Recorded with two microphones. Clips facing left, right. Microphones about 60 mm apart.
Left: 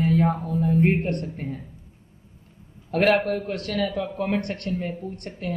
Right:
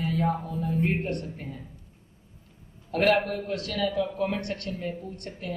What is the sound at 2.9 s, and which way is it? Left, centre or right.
A man's voice, left.